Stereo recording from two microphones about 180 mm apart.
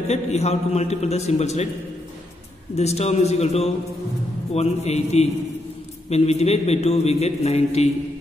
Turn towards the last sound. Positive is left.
turn(degrees=35)  # may be behind; listen again after turning